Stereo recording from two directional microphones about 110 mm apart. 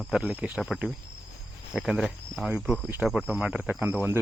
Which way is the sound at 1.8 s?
Centre (ahead or behind).